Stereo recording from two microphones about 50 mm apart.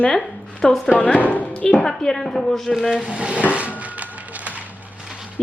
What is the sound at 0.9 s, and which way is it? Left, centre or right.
Speech, left.